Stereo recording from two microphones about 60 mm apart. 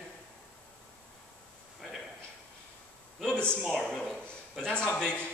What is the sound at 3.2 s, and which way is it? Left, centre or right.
Speech, centre.